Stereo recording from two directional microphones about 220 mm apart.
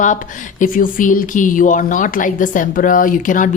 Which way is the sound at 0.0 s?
35° left (ahead or behind).